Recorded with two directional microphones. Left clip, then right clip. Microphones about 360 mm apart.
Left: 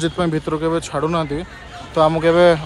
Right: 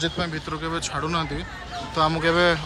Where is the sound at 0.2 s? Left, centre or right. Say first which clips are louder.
Left 9 dB; centre.